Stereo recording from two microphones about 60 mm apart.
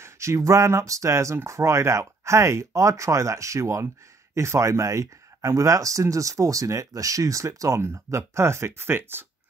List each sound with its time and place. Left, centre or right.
0.0 s speech: right
7.8 s speech: right